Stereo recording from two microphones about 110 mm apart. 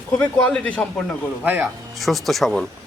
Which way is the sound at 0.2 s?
15° left (ahead or behind).